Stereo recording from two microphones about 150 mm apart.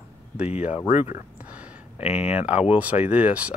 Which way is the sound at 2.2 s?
10° right (ahead or behind).